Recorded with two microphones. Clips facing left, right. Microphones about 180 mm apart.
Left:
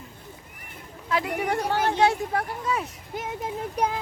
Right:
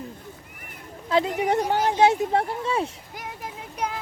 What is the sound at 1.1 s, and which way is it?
Speech, 20° right (ahead or behind).